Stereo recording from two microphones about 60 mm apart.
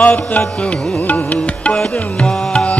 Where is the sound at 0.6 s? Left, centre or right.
Left.